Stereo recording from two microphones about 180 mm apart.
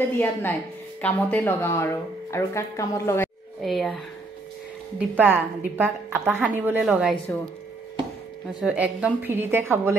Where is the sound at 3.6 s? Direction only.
Centre (ahead or behind).